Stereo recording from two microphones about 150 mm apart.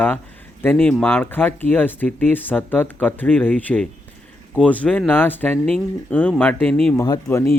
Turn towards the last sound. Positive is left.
turn(degrees=20)  # may be behind; listen again after turning